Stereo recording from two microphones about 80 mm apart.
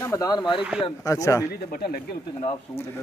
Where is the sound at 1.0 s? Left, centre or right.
Left.